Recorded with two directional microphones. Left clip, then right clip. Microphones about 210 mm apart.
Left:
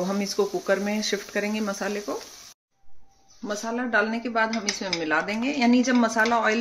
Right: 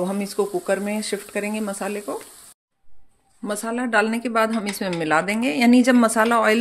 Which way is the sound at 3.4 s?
45° right (ahead or behind).